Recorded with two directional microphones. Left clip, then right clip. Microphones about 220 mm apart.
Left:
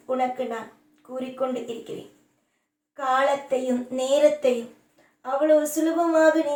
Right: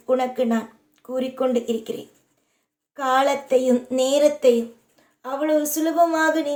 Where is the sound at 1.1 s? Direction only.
55° right (ahead or behind).